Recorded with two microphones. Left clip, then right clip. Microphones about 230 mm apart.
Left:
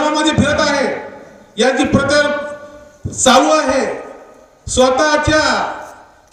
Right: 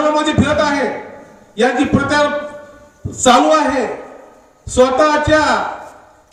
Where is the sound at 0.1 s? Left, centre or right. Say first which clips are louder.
Even; left.